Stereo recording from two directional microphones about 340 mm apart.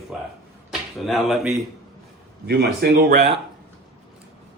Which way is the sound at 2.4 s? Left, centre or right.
Right.